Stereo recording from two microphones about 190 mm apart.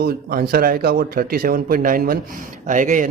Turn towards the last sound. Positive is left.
turn(degrees=-45)  # may be behind; listen again after turning